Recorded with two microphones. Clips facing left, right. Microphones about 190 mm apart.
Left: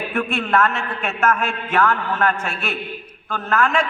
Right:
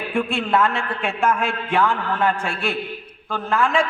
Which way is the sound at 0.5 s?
15° right (ahead or behind).